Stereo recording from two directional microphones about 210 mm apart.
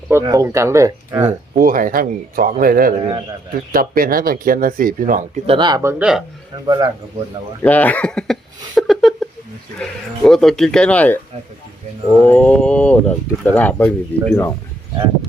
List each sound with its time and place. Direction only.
0.1 s speech: 15° right (ahead or behind)
1.5 s speech: 40° right (ahead or behind)
5.5 s speech: 20° right (ahead or behind); by 6.2 s 5° right (ahead or behind)
6.7 s speech: 20° right (ahead or behind)
7.6 s a sound: 10° left (ahead or behind)
9.7 s speech: 5° left (ahead or behind)
12.3 s speech: 5° left (ahead or behind)